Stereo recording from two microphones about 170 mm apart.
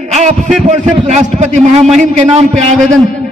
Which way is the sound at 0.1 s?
40° right (ahead or behind).